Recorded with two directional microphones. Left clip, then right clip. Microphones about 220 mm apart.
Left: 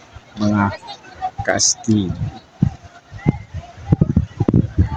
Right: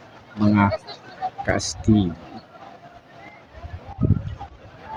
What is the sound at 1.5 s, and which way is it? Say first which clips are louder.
Speech: left 6 dB; centre (ahead or behind).